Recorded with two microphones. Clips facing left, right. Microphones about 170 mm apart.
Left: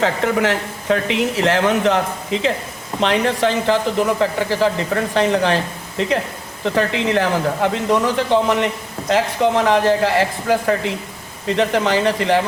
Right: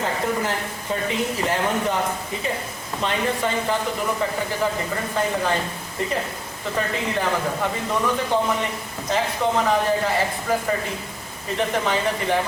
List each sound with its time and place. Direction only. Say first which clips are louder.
0.0 s speech: left 6 dB; 85° left